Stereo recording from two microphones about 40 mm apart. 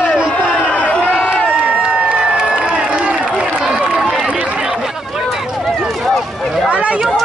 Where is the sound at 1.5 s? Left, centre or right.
Right.